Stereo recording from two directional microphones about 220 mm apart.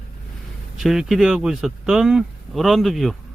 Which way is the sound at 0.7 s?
Centre (ahead or behind).